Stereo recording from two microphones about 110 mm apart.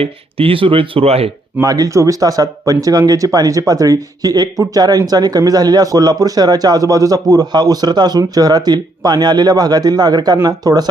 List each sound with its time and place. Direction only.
0.0 s speech: 60° right (ahead or behind)
1.6 s speech: 35° right (ahead or behind)